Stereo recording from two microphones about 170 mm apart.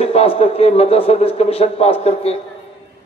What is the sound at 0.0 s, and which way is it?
A man's voice, 35° left (ahead or behind).